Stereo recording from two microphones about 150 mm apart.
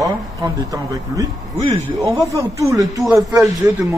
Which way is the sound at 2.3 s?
20° right (ahead or behind).